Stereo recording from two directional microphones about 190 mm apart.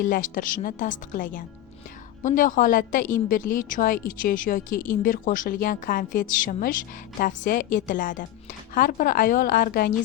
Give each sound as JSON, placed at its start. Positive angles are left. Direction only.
{"t": 0.0, "sound": "a woman's voice", "side_deg": 45}